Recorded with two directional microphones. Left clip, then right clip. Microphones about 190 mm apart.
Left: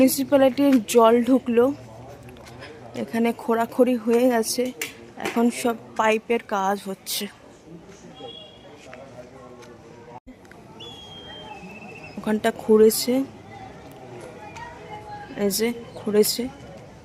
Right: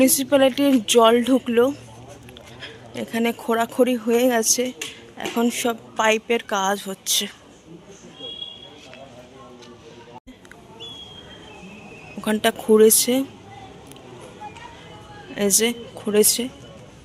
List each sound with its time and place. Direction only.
0.0 s a woman's voice: 5° left (ahead or behind)
12.2 s a woman's voice: centre (ahead or behind)
15.4 s a woman's voice: centre (ahead or behind)